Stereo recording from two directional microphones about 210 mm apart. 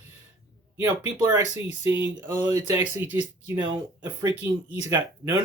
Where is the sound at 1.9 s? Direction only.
10° right (ahead or behind).